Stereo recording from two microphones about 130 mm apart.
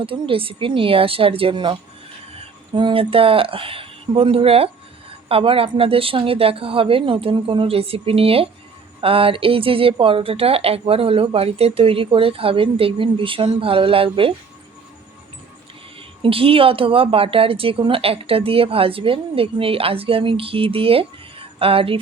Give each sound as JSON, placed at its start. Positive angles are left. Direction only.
{"t": 0.0, "sound": "a woman's voice", "side_deg": -45}
{"t": 16.2, "sound": "a woman's voice", "side_deg": -45}